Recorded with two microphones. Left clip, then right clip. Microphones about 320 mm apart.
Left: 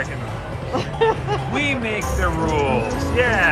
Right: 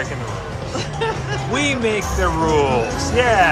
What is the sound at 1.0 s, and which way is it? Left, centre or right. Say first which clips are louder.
Speech: left 5 dB; centre.